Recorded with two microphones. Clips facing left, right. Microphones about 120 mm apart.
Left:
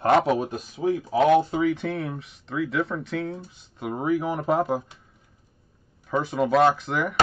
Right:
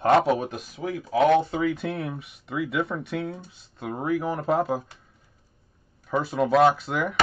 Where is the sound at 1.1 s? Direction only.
5° left (ahead or behind).